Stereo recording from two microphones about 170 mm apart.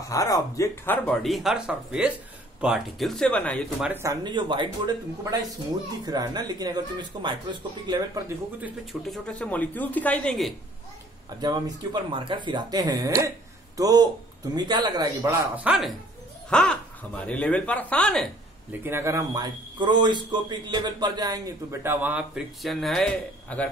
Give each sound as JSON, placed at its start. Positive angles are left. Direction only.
{"t": 0.1, "sound": "speech", "side_deg": 20}
{"t": 1.2, "sound": "speech", "side_deg": 0}
{"t": 3.8, "sound": "speech", "side_deg": -15}
{"t": 8.5, "sound": "speech", "side_deg": -5}
{"t": 11.2, "sound": "speech", "side_deg": -25}
{"t": 15.5, "sound": "a man's voice", "side_deg": -5}
{"t": 16.4, "sound": "babbling", "side_deg": 5}
{"t": 17.2, "sound": "speech", "side_deg": 10}
{"t": 18.7, "sound": "a man's voice", "side_deg": -15}